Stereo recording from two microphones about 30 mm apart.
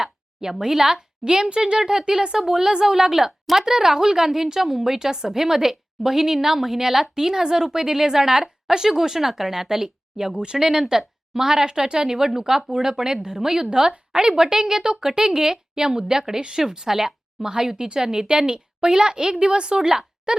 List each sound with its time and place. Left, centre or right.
0.6 s a woman's voice: centre
1.2 s a woman's voice: right; by 4.9 s centre
4.9 s a woman's voice: right
10.3 s a woman's voice: right